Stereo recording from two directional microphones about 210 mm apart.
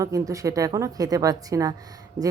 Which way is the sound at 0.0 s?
15° right (ahead or behind).